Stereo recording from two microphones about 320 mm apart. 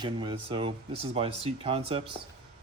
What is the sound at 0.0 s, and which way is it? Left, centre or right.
Speech, centre.